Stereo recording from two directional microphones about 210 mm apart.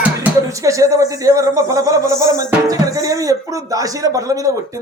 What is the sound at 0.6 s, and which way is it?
Speech, 15° right (ahead or behind).